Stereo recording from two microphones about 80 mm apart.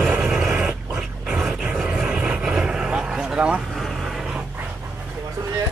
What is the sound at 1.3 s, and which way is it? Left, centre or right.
Vehicle, centre.